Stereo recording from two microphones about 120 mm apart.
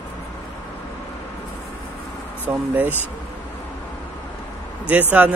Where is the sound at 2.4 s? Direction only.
15° right (ahead or behind).